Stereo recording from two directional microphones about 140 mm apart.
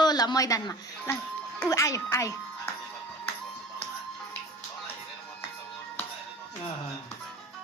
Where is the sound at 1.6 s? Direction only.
20° left (ahead or behind).